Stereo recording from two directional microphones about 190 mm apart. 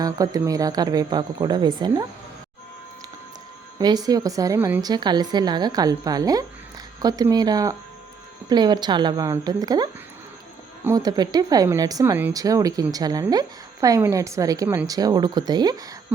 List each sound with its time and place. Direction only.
0.0 s a woman's voice: 20° right (ahead or behind)
3.8 s a woman's voice: 20° right (ahead or behind)